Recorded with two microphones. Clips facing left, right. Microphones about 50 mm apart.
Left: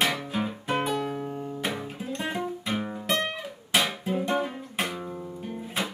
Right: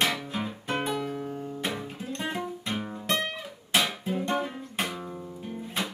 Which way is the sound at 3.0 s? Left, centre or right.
Centre.